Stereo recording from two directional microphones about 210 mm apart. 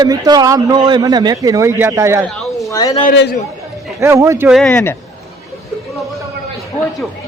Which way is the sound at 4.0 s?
15° right (ahead or behind).